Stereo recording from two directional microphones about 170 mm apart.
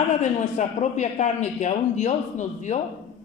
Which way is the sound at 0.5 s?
45° left (ahead or behind).